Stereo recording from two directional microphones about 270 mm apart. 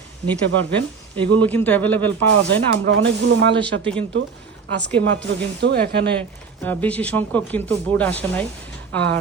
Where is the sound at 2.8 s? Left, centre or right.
Right.